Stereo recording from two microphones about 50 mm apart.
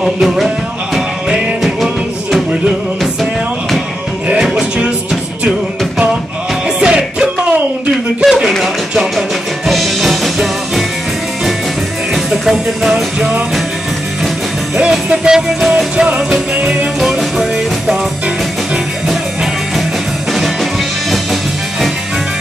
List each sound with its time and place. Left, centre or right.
0.0 s music: centre
4.3 s music: centre
6.8 s music: centre
8.3 s chopping: centre
9.7 s music: centre
12.1 s music: centre
14.8 s music: centre